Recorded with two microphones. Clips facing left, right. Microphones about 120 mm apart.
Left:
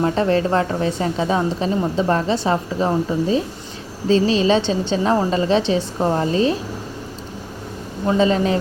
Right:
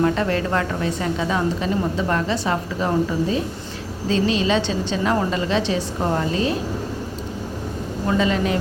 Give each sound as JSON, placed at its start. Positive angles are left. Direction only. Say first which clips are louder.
{"t": 0.0, "sound": "a woman's voice", "louder": "left 2 dB", "side_deg": 30}
{"t": 8.0, "sound": "a woman's voice", "louder": "left 4 dB", "side_deg": 30}